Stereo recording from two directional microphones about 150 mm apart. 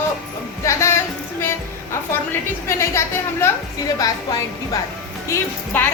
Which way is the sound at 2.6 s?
20° left (ahead or behind).